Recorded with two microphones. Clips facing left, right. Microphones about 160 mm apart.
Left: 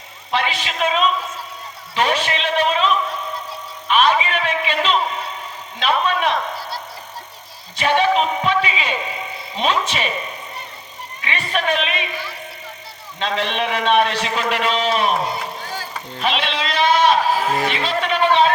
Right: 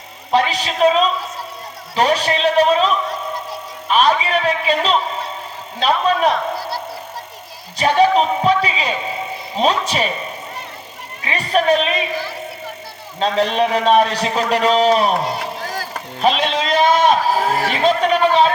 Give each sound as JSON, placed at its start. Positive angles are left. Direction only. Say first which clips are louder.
{"t": 0.3, "sound": "a man's voice", "louder": "right 5 dB", "side_deg": -40}
{"t": 2.0, "sound": "a sound", "louder": "right 4 dB", "side_deg": -40}
{"t": 3.8, "sound": "a man's voice", "louder": "right 1 dB", "side_deg": -35}
{"t": 7.8, "sound": "a man's voice", "louder": "right 3 dB", "side_deg": -35}
{"t": 11.2, "sound": "a man's voice", "louder": "right 5 dB", "side_deg": -40}
{"t": 16.2, "sound": "a sound", "louder": "right 5 dB", "side_deg": -40}